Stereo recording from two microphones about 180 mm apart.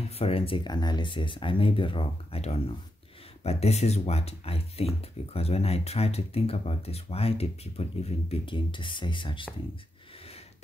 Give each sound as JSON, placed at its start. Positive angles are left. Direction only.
{"t": 0.2, "sound": "speech", "side_deg": 30}